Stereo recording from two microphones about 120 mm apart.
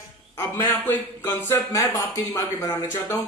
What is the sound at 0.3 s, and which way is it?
A man's voice, 20° left (ahead or behind).